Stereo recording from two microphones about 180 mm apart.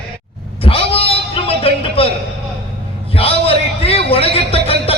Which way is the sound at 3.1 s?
30° left (ahead or behind).